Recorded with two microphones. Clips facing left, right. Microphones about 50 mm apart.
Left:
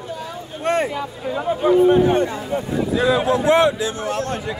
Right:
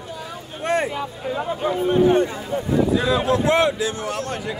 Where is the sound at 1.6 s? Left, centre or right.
Centre.